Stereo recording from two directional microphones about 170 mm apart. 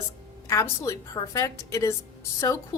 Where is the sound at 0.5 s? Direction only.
20° left (ahead or behind).